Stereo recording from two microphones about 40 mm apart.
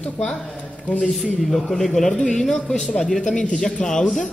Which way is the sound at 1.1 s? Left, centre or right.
Centre.